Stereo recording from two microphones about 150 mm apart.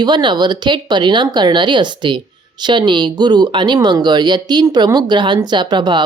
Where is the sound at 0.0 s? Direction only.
30° right (ahead or behind).